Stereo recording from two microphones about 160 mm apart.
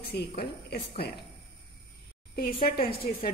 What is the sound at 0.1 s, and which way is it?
Speech, 80° left.